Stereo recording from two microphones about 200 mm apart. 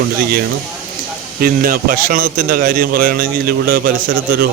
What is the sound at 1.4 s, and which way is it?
A man's voice, 45° right (ahead or behind).